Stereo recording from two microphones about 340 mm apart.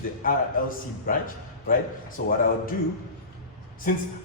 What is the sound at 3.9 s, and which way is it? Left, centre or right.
Speech, left.